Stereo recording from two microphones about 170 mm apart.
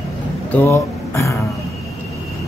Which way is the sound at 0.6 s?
15° left (ahead or behind).